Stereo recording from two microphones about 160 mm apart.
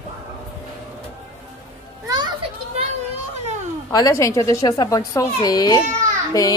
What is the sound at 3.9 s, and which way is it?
Speech, 20° left (ahead or behind).